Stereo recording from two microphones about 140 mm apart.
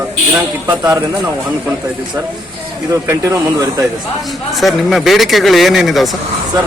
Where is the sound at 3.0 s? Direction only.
20° right (ahead or behind).